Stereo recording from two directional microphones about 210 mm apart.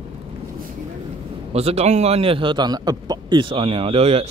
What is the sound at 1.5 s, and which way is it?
A man's voice, 30° right (ahead or behind).